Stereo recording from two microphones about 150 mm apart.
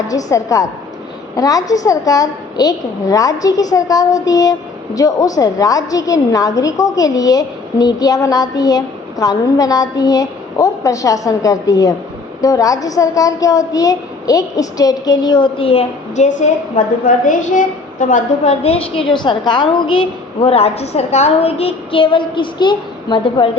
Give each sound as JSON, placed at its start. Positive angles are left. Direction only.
{"t": 0.1, "sound": "a woman's voice", "side_deg": 20}